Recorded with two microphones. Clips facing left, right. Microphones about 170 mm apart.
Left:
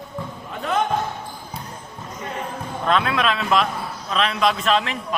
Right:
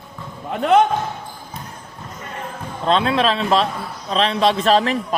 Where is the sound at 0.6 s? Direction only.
70° right (ahead or behind).